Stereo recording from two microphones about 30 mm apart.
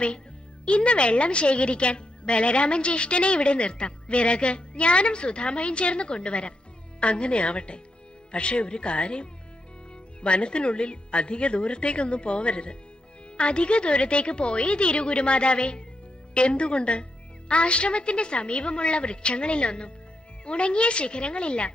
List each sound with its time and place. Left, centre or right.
0.6 s a woman's voice: left